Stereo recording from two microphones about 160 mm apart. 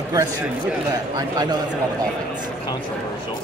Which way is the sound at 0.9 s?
25° right (ahead or behind).